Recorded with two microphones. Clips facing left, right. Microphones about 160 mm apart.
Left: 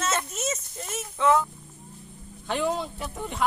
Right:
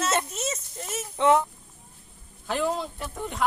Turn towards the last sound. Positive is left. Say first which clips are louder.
# even
turn(degrees=0)  # may be behind; listen again after turning